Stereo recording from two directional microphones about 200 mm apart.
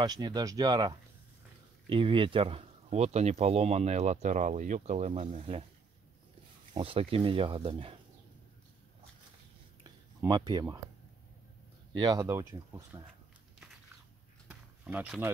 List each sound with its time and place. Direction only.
0.0 s speech: 20° right (ahead or behind)
6.7 s speech: 25° right (ahead or behind)
10.2 s speech: 20° right (ahead or behind)
11.9 s speech: 20° right (ahead or behind)
14.5 s a sound: 10° right (ahead or behind)